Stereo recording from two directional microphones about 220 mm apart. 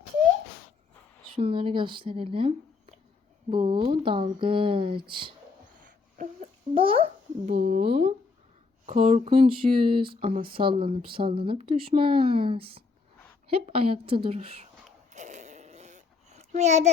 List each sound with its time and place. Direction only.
1.4 s speech: 25° right (ahead or behind)
5.8 s a sound: 35° right (ahead or behind)
6.7 s speech: 25° right (ahead or behind)
7.6 s speech: 45° right (ahead or behind)
8.9 s speech: 30° right (ahead or behind)
15.1 s a sound: 30° right (ahead or behind)